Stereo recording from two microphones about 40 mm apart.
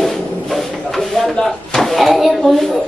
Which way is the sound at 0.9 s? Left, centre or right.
Centre.